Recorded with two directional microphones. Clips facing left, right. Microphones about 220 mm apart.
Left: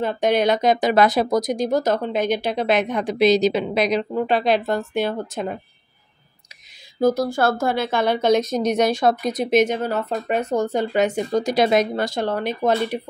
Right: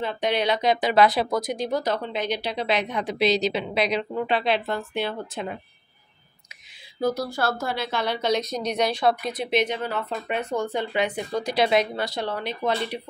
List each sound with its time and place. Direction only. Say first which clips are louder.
0.0 s speech: left 6 dB; 45° left (ahead or behind)
7.0 s speech: left 6 dB; 45° left (ahead or behind)